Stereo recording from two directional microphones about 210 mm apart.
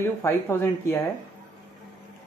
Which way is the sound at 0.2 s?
10° left (ahead or behind).